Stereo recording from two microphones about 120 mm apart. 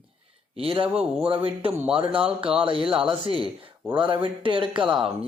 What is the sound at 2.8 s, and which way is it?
Speech, 10° right (ahead or behind).